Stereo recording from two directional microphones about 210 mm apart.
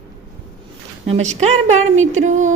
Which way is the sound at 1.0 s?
30° right (ahead or behind).